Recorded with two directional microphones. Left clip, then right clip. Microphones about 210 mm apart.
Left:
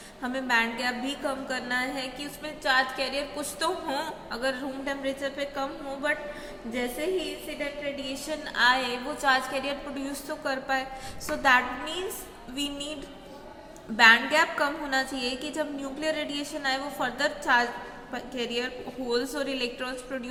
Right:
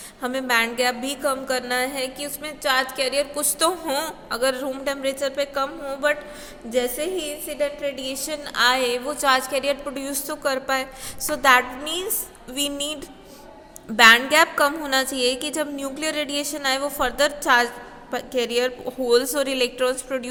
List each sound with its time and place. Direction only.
0.2 s a woman's voice: 50° right (ahead or behind)